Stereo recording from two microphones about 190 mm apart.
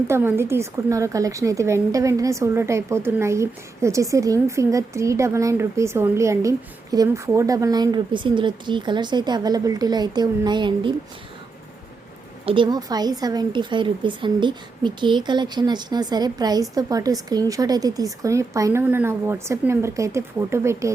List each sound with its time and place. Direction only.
0.1 s a woman's voice: 10° right (ahead or behind)
12.5 s speech: 25° right (ahead or behind)